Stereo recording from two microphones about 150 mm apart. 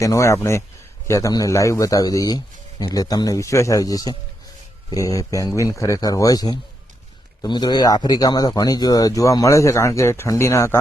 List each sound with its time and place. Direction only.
0.0 s speech: 20° left (ahead or behind)